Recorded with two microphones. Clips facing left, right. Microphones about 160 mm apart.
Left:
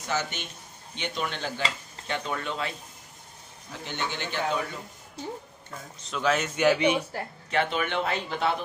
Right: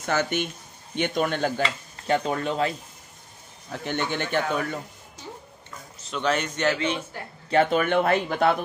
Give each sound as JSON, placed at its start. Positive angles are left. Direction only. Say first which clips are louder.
{"t": 0.0, "sound": "speech", "louder": "right 6 dB", "side_deg": -55}
{"t": 3.7, "sound": "speech", "louder": "right 6 dB", "side_deg": -55}
{"t": 6.0, "sound": "speech", "louder": "right 1 dB", "side_deg": 0}
{"t": 7.5, "sound": "speech", "louder": "right 6 dB", "side_deg": -45}